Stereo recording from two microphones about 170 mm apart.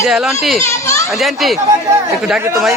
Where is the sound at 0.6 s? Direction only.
15° left (ahead or behind).